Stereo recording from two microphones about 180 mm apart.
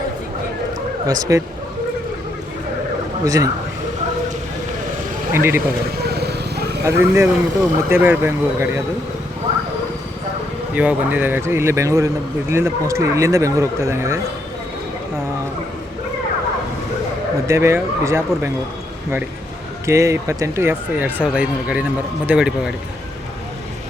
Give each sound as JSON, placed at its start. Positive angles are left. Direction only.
{"t": 1.0, "sound": "speech", "side_deg": -20}
{"t": 3.2, "sound": "speech", "side_deg": -20}
{"t": 5.3, "sound": "speech", "side_deg": -15}
{"t": 6.0, "sound": "vehicle", "side_deg": -65}
{"t": 6.8, "sound": "speech", "side_deg": -15}
{"t": 10.8, "sound": "speech", "side_deg": -10}
{"t": 17.4, "sound": "speech", "side_deg": -15}
{"t": 19.8, "sound": "speech", "side_deg": -15}